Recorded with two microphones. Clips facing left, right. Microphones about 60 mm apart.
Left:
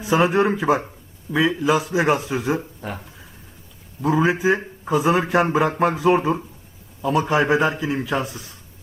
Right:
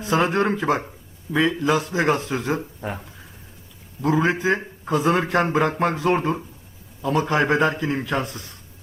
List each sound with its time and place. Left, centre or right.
0.0 s speech: centre
4.0 s speech: centre